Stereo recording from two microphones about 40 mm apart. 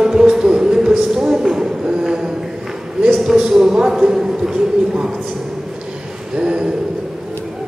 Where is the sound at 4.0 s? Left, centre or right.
Centre.